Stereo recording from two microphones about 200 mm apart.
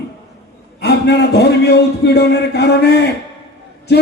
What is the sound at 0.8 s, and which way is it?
A man's voice, 55° left (ahead or behind).